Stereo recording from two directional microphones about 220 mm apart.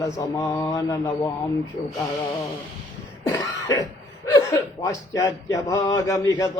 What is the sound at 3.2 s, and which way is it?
Cough, 15° left (ahead or behind).